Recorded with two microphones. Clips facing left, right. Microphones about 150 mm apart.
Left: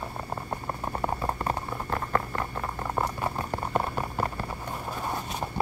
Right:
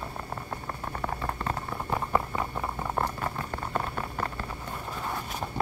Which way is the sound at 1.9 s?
10° right (ahead or behind).